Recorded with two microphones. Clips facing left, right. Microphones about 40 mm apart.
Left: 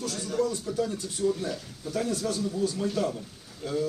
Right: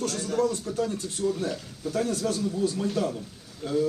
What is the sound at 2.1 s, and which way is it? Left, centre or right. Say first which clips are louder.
Speech: right 2 dB; right.